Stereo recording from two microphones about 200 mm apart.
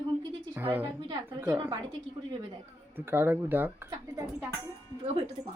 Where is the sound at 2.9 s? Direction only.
10° right (ahead or behind).